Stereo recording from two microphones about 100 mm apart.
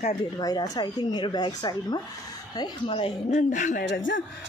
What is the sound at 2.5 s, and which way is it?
Speech, 55° left (ahead or behind).